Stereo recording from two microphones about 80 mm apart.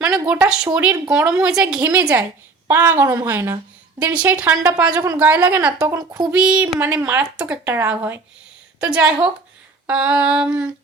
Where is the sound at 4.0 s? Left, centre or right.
Centre.